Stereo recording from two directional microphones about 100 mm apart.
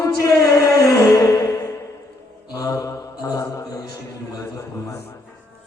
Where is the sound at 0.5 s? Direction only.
35° left (ahead or behind).